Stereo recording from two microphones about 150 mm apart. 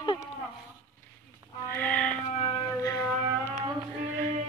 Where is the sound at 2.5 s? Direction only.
20° left (ahead or behind).